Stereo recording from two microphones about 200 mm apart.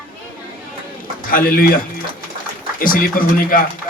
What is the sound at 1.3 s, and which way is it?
Speech, 45° left (ahead or behind).